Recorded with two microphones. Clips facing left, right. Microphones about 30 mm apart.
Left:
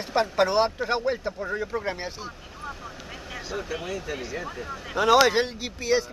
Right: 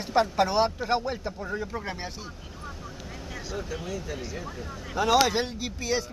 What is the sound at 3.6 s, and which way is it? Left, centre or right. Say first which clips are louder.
Speech: left 3 dB; left.